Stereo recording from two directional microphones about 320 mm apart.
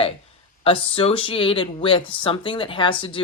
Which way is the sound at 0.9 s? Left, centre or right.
Centre.